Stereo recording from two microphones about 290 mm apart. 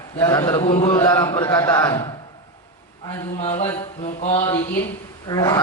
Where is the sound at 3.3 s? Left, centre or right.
Left.